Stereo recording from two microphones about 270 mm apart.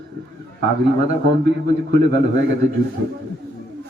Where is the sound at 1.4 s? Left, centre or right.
Right.